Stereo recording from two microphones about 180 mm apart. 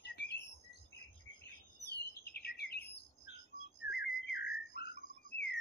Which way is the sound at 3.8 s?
65° left (ahead or behind).